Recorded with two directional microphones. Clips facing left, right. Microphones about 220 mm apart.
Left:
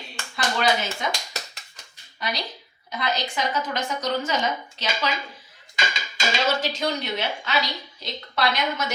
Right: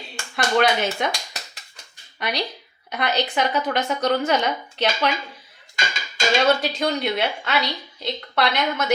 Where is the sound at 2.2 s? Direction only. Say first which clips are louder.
Right 4 dB; 65° right (ahead or behind).